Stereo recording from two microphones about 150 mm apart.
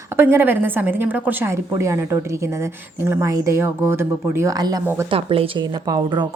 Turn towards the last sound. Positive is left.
turn(degrees=-25)  # may be behind; listen again after turning